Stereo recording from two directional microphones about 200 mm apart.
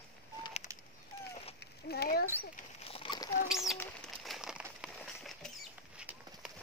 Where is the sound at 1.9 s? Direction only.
50° left (ahead or behind).